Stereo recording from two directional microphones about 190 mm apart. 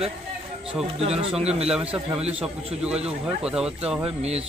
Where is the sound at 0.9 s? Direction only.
30° right (ahead or behind).